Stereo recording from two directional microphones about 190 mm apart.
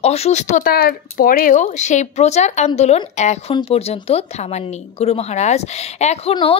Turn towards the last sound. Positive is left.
turn(degrees=30)  # may be behind; listen again after turning